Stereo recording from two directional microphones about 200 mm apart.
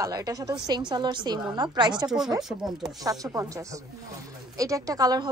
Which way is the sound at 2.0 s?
Centre (ahead or behind).